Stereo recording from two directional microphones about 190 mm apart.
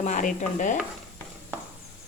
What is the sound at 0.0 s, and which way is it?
Stir, 40° left (ahead or behind).